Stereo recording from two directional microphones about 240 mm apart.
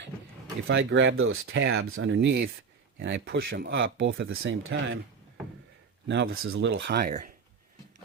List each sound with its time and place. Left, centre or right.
0.7 s speech: right
6.1 s speech: right